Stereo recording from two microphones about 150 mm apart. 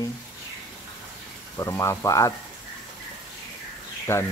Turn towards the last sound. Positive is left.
turn(degrees=15)  # may be behind; listen again after turning